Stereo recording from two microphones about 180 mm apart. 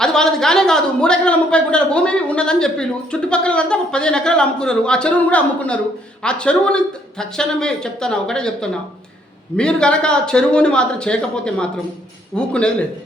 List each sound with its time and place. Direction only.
0.0 s speech: 5° left (ahead or behind)